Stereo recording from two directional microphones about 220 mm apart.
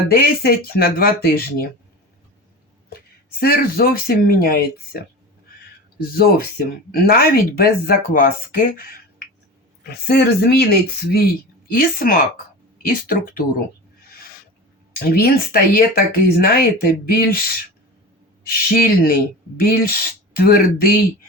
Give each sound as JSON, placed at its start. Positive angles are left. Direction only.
{"t": 0.1, "sound": "speech", "side_deg": 45}
{"t": 3.4, "sound": "speech", "side_deg": 45}
{"t": 6.1, "sound": "speech", "side_deg": 40}
{"t": 14.9, "sound": "speech", "side_deg": 45}
{"t": 18.5, "sound": "speech", "side_deg": 40}